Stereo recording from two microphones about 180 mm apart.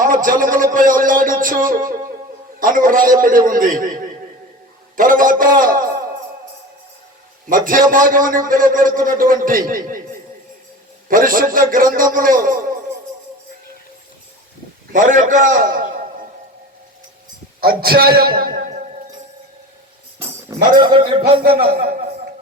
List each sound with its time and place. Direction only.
0.0 s a man's voice: 50° right (ahead or behind)
7.5 s a man's voice: 50° right (ahead or behind)
11.1 s a man's voice: 50° right (ahead or behind)
14.9 s a man's voice: 45° right (ahead or behind)
17.6 s a man's voice: 55° right (ahead or behind)
20.1 s speech: 20° right (ahead or behind)
21.6 s a man's voice: 60° right (ahead or behind)